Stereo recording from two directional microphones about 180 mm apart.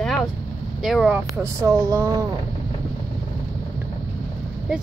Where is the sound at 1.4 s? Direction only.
15° right (ahead or behind).